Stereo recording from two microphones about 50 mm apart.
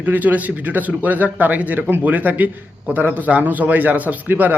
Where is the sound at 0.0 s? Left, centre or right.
Right.